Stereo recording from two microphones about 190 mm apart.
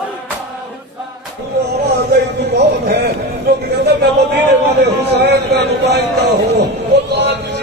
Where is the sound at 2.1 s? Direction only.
65° right (ahead or behind).